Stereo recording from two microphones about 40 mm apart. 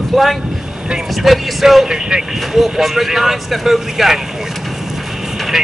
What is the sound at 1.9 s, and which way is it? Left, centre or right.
Speech, right.